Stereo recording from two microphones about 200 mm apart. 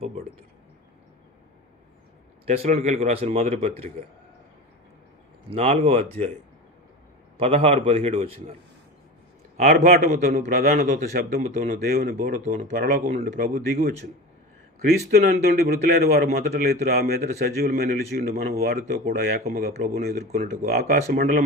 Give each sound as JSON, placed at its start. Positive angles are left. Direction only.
{"t": 2.5, "sound": "speech", "side_deg": -35}
{"t": 5.5, "sound": "speech", "side_deg": -30}
{"t": 7.3, "sound": "a man's voice", "side_deg": -30}
{"t": 9.9, "sound": "a man's voice", "side_deg": -50}
{"t": 14.8, "sound": "a man's voice", "side_deg": -50}